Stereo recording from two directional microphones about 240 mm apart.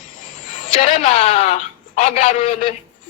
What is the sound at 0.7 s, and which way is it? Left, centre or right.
A man's voice, left.